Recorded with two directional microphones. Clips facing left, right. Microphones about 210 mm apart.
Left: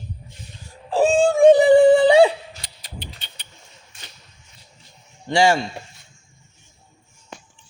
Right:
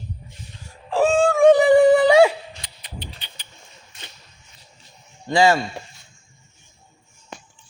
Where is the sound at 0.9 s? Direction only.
30° left (ahead or behind).